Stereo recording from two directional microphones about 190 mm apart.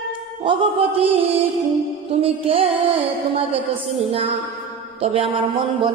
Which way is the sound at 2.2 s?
30° right (ahead or behind).